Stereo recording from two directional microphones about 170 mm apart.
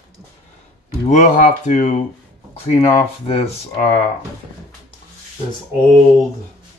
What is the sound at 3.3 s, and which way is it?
Speech, 40° left (ahead or behind).